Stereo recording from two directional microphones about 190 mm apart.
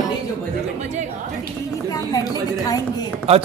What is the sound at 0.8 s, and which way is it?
Speech, 35° right (ahead or behind).